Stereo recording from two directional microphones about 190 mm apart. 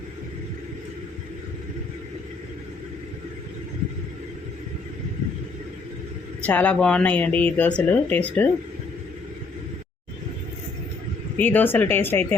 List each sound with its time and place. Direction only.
6.4 s speech: 5° left (ahead or behind)
11.3 s speech: 10° left (ahead or behind)